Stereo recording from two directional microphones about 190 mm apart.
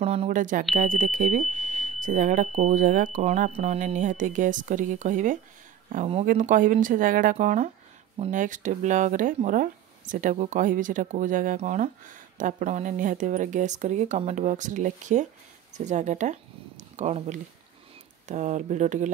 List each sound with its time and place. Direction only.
0.0 s speech: 30° right (ahead or behind)